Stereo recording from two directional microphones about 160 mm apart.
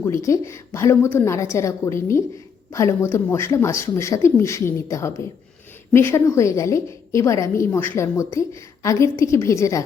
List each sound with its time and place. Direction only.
0.0 s a woman's voice: 20° left (ahead or behind)